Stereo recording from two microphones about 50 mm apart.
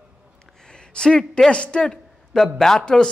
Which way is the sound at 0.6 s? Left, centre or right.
Centre.